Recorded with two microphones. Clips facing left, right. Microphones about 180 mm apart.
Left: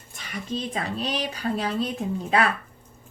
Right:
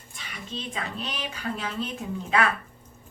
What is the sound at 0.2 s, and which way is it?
A woman's voice, 45° left (ahead or behind).